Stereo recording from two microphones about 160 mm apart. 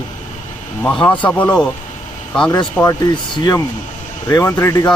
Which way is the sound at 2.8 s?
15° left (ahead or behind).